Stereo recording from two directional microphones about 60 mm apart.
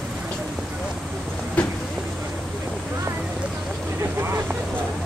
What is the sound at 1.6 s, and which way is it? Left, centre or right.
Vehicle, left.